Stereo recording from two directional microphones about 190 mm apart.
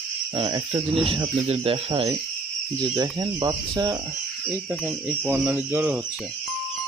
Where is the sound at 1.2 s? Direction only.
30° right (ahead or behind).